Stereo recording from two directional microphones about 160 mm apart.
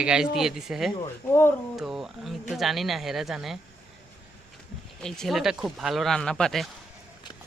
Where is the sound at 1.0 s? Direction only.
15° left (ahead or behind).